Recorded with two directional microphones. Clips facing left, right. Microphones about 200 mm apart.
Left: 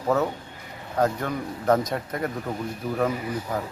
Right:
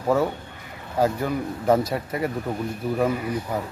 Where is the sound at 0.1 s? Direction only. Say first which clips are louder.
Right 2 dB; 10° right (ahead or behind).